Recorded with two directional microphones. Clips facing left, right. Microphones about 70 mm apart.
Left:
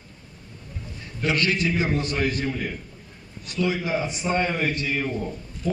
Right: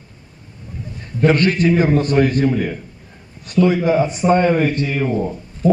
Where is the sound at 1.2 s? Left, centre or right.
Right.